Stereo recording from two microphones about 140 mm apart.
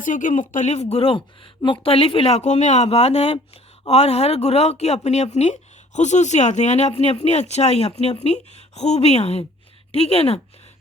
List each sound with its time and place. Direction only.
0.0 s speech: 65° left (ahead or behind); by 10.4 s 45° left (ahead or behind)